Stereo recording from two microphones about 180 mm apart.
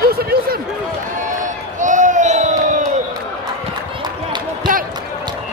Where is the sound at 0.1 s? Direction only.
55° right (ahead or behind).